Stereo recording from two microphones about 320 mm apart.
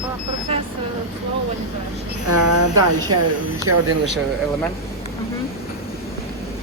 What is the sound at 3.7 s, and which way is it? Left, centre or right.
Speech, right.